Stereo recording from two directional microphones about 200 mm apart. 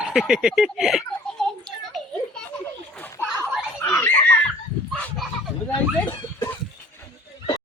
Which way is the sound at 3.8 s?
10° left (ahead or behind).